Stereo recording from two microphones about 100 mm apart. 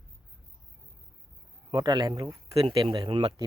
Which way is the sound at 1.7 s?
45° right (ahead or behind).